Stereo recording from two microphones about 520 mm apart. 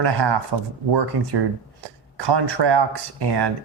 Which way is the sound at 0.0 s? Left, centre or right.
Right.